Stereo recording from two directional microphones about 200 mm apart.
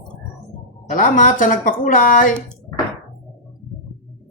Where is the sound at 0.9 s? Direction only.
40° left (ahead or behind).